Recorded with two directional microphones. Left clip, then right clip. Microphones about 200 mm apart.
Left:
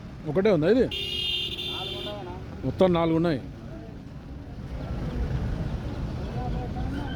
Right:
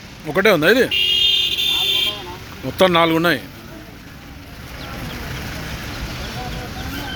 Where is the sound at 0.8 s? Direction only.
35° right (ahead or behind).